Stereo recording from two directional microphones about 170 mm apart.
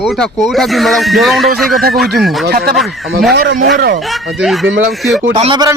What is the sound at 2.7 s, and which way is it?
Speech, centre (ahead or behind).